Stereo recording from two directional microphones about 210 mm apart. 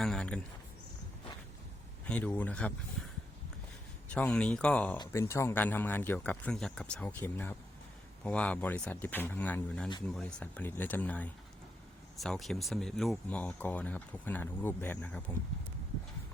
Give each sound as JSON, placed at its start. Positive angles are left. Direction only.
{"t": 0.0, "sound": "speech", "side_deg": 5}
{"t": 2.0, "sound": "speech", "side_deg": 5}
{"t": 4.1, "sound": "speech", "side_deg": 5}